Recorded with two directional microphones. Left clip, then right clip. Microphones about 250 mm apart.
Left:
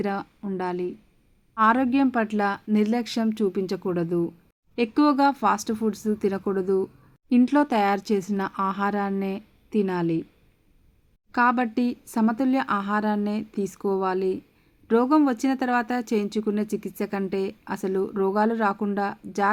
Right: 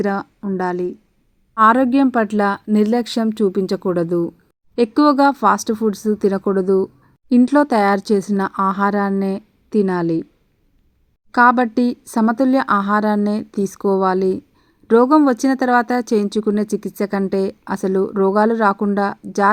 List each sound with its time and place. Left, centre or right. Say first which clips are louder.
0.0 s a woman's voice: right 8 dB; centre
11.3 s a woman's voice: right 9 dB; centre